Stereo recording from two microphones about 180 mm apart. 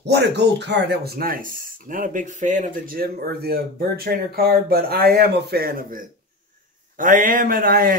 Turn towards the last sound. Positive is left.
turn(degrees=-55)  # may be behind; listen again after turning